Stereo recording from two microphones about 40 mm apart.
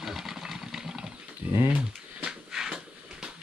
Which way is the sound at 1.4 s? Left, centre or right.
Right.